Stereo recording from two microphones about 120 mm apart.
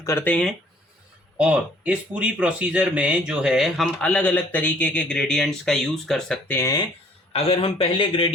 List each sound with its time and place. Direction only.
0.0 s speech: 25° left (ahead or behind)
0.3 s speech: 5° left (ahead or behind)
1.4 s speech: 10° right (ahead or behind)
4.0 s speech: 10° left (ahead or behind)
6.5 s speech: 20° left (ahead or behind)
7.3 s a man's voice: 55° left (ahead or behind)